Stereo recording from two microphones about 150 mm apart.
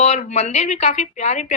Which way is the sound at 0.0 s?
50° left (ahead or behind).